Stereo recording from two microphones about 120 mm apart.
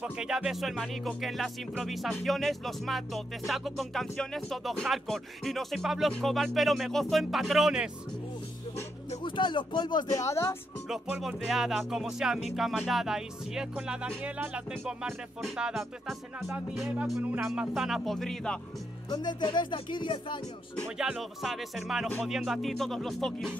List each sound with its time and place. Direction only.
0.0 s music: 5° right (ahead or behind)
9.2 s speech: 40° left (ahead or behind)
10.2 s speech: 25° left (ahead or behind)
10.9 s music: 5° right (ahead or behind)
17.2 s music: 10° right (ahead or behind); by 18.6 s 5° left (ahead or behind)
19.0 s speech: 35° left (ahead or behind)
21.0 s music: 5° right (ahead or behind)